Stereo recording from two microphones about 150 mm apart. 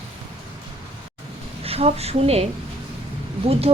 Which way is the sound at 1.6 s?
40° right (ahead or behind).